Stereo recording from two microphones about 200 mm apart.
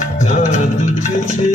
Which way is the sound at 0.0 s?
40° left (ahead or behind).